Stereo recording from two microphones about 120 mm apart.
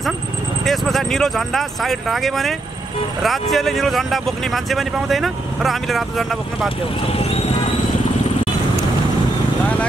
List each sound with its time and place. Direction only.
0.7 s speech: centre (ahead or behind)
7.1 s speech: 55° left (ahead or behind)